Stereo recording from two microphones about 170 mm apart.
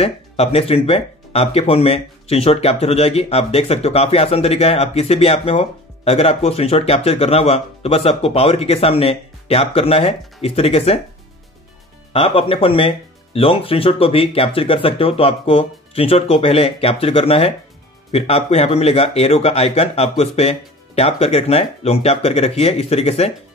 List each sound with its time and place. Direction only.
0.0 s speech: 35° left (ahead or behind)
12.1 s speech: 35° left (ahead or behind)